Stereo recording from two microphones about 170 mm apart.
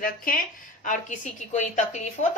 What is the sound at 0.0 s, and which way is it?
A woman's voice, 55° left (ahead or behind).